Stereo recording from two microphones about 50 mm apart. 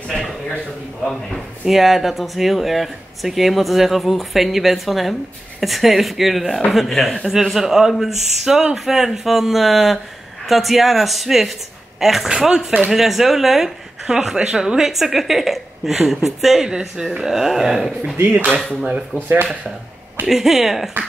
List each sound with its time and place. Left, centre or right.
1.0 s speech: centre
19.1 s speech: right
20.2 s speech: centre